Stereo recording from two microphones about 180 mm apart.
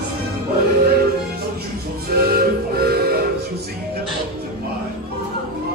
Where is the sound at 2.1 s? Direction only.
60° right (ahead or behind).